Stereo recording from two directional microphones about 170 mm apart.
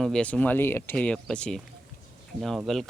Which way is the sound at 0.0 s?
5° left (ahead or behind).